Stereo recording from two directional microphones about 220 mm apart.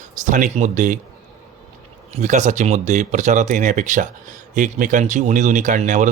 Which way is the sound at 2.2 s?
35° right (ahead or behind).